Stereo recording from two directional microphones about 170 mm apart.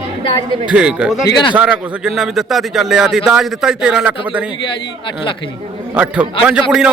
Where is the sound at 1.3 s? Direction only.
25° left (ahead or behind).